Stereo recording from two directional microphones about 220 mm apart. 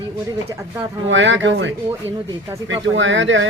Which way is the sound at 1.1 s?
55° right (ahead or behind).